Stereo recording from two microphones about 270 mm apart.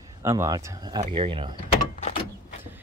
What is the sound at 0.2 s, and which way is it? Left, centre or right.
Speech, centre.